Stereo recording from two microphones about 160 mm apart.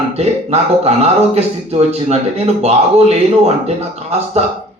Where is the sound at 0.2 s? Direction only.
40° right (ahead or behind).